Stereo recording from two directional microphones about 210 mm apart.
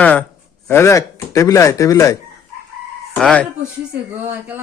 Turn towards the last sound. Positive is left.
turn(degrees=-5)  # may be behind; listen again after turning